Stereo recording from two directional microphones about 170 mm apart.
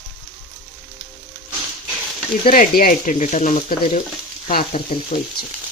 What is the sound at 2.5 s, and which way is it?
Speech, 55° left (ahead or behind).